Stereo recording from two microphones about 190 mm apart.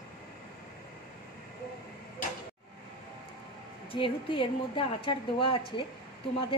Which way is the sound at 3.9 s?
25° left (ahead or behind).